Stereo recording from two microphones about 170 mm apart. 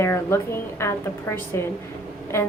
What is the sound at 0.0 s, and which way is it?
A woman's voice, 15° left (ahead or behind).